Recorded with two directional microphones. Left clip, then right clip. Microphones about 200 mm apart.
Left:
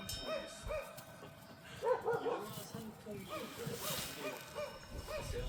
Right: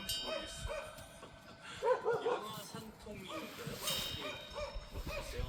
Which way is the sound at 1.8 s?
60° right (ahead or behind).